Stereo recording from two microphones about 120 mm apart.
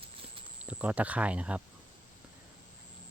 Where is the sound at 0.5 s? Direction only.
10° right (ahead or behind).